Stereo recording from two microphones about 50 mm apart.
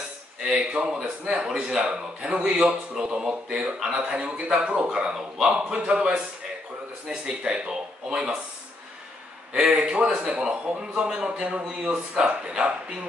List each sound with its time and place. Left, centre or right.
0.5 s a man's voice: centre
9.5 s a man's voice: centre